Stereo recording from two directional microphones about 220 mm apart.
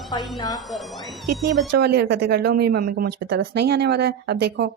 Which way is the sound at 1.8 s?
50° right (ahead or behind).